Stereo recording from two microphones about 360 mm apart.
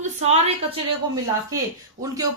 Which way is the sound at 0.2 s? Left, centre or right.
Centre.